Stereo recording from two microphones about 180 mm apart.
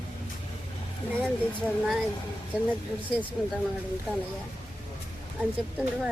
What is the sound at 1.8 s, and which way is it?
Speech, centre (ahead or behind).